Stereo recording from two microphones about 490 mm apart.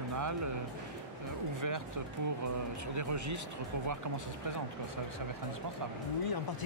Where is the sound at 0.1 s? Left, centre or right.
Right.